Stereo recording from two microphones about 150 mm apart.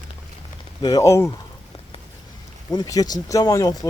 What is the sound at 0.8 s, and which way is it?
Speech, 25° left (ahead or behind).